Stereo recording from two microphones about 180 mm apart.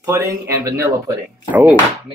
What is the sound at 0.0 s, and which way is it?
Speech, 15° right (ahead or behind).